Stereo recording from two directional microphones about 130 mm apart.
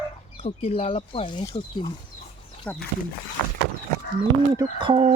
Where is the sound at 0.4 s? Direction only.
50° left (ahead or behind).